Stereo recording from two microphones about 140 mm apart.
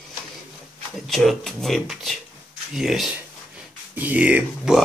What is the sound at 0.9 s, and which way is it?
Speech, centre (ahead or behind).